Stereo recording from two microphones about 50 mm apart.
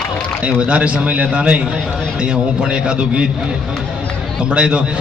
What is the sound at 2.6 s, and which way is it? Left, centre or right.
Speech, centre.